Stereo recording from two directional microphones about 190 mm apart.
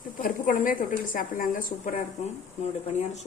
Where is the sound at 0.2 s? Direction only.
45° left (ahead or behind).